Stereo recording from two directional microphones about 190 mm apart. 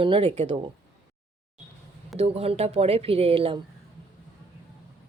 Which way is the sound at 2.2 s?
30° right (ahead or behind).